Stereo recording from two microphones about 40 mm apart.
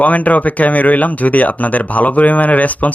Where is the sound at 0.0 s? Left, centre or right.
Left.